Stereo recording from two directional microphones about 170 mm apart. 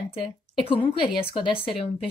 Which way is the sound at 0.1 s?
30° left (ahead or behind).